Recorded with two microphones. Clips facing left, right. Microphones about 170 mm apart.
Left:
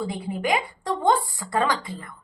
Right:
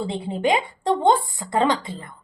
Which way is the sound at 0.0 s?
25° right (ahead or behind).